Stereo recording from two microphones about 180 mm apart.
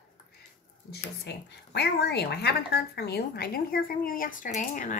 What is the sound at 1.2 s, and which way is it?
Speech, 65° left (ahead or behind).